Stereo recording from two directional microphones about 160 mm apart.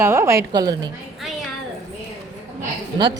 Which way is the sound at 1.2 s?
Centre (ahead or behind).